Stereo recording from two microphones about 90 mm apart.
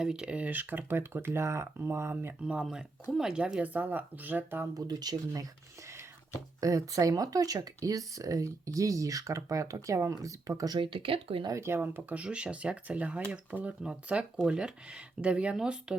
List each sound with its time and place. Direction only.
0.0 s speech: 10° right (ahead or behind); by 2.3 s 30° right (ahead or behind)
2.4 s speech: 10° right (ahead or behind)
4.7 s speech: 45° right (ahead or behind)
6.6 s speech: 40° right (ahead or behind)
10.8 s speech: 80° right
11.4 s speech: 30° right (ahead or behind); by 16.0 s 10° right (ahead or behind)